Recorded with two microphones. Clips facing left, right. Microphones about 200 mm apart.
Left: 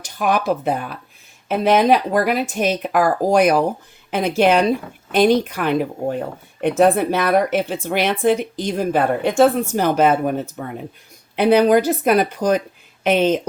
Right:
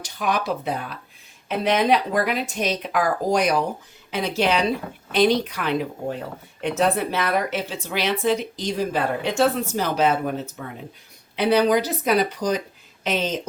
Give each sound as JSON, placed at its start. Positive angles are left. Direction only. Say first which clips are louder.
{"t": 0.0, "sound": "speech", "louder": "left 5 dB", "side_deg": 50}